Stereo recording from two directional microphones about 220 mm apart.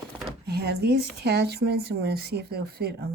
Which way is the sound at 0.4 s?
45° right (ahead or behind).